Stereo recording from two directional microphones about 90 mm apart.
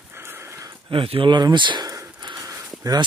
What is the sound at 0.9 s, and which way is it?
Speech, 80° right.